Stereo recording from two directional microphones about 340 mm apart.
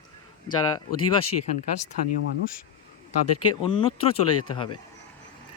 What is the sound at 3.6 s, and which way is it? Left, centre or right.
Speech, centre.